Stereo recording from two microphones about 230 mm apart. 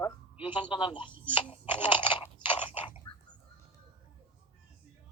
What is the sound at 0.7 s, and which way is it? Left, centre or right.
Speech, left.